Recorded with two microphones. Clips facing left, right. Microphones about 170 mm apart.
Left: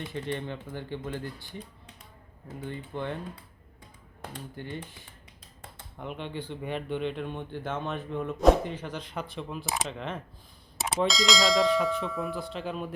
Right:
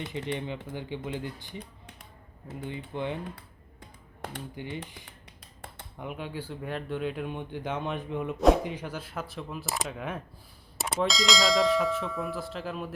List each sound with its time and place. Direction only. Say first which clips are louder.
0.1 s speech: even; 15° right (ahead or behind)
2.6 s speech: right 1 dB; 15° right (ahead or behind)
4.2 s speech: right 2 dB; 70° right (ahead or behind)
4.5 s speech: left 1 dB; 15° right (ahead or behind)
6.0 s speech: even; 5° right (ahead or behind)